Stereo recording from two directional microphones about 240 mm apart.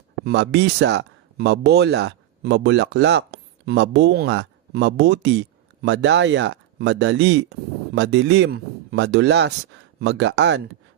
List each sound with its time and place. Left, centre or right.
0.3 s speech: right